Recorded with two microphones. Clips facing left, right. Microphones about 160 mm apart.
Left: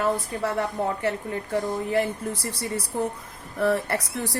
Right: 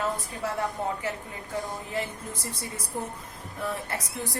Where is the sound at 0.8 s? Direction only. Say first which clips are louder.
Left 5 dB; 65° left (ahead or behind).